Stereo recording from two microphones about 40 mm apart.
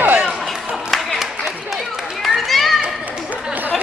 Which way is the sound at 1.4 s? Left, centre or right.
Centre.